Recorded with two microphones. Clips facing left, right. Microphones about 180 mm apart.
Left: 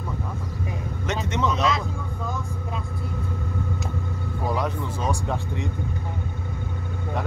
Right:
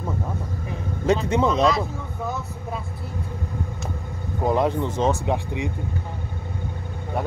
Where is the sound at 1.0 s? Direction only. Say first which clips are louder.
Right 6 dB; 30° right (ahead or behind).